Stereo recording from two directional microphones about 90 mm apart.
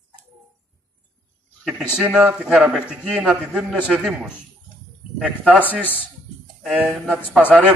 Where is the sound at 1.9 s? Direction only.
15° right (ahead or behind).